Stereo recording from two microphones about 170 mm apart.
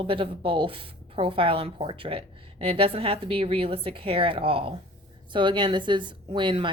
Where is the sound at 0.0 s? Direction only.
30° right (ahead or behind).